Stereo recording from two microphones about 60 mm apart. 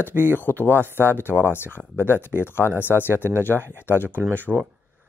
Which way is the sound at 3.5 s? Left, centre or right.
Right.